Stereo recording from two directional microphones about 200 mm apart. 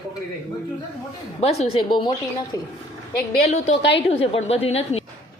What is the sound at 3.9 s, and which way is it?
A woman's voice, 30° left (ahead or behind).